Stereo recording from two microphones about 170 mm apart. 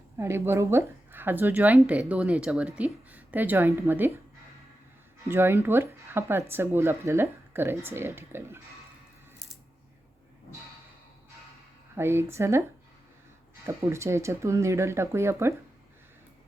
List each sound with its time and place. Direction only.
0.2 s a woman's voice: 15° right (ahead or behind)
5.3 s a woman's voice: 15° right (ahead or behind)
11.9 s a woman's voice: 15° right (ahead or behind)
13.7 s a woman's voice: 15° right (ahead or behind)